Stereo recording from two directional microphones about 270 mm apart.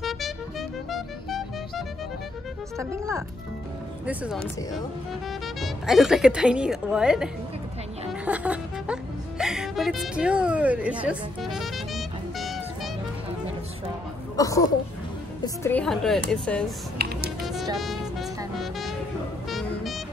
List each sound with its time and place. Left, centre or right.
0.0 s music: centre
2.8 s a woman's voice: centre
5.6 s a woman's voice: centre
8.1 s music: centre
14.3 s a woman's voice: centre
17.0 s music: right
18.6 s music: centre